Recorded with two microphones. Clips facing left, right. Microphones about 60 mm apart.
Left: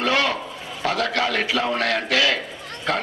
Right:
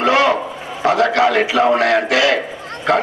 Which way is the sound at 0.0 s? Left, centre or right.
Right.